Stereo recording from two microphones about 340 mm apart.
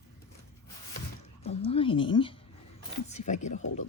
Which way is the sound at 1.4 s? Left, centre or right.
Centre.